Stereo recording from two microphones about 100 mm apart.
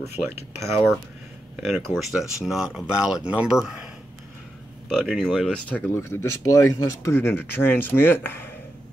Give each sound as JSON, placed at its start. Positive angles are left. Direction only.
{"t": 0.6, "sound": "speech", "side_deg": 0}
{"t": 4.8, "sound": "speech", "side_deg": 5}
{"t": 5.9, "sound": "speech", "side_deg": 25}